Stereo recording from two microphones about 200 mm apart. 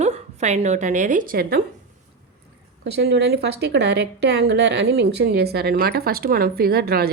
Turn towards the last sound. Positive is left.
turn(degrees=-50)  # may be behind; listen again after turning